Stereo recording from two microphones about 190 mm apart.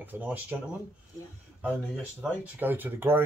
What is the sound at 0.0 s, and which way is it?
Speech, 10° right (ahead or behind).